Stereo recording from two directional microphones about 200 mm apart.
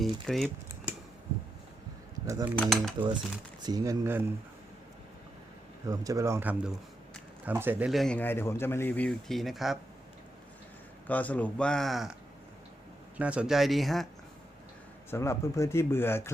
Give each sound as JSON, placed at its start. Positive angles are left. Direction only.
{"t": 0.0, "sound": "speech", "side_deg": 0}
{"t": 2.2, "sound": "speech", "side_deg": -15}
{"t": 2.6, "sound": "speech", "side_deg": 0}
{"t": 3.6, "sound": "speech", "side_deg": -20}
{"t": 5.8, "sound": "speech", "side_deg": -15}
{"t": 11.0, "sound": "speech", "side_deg": 10}
{"t": 13.1, "sound": "speech", "side_deg": -5}
{"t": 15.1, "sound": "speech", "side_deg": 15}